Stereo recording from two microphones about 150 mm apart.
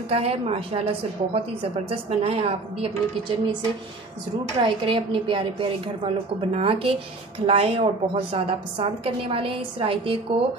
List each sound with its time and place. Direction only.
0.1 s a woman's voice: 40° right (ahead or behind)
4.6 s a woman's voice: 35° right (ahead or behind)